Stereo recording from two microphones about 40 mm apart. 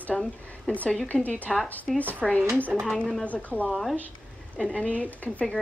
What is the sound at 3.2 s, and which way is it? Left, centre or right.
Speech, left.